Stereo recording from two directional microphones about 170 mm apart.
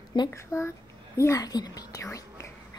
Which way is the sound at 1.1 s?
20° left (ahead or behind).